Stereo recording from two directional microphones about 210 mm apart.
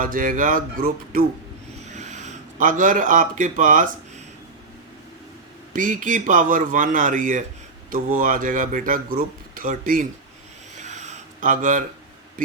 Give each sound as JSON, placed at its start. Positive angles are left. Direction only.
{"t": 0.0, "sound": "speech", "side_deg": -40}
{"t": 5.7, "sound": "speech", "side_deg": -40}
{"t": 10.8, "sound": "a sound", "side_deg": -35}